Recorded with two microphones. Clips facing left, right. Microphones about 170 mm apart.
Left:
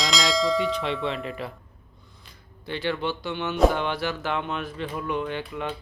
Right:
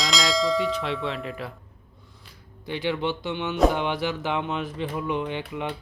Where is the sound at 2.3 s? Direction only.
15° right (ahead or behind).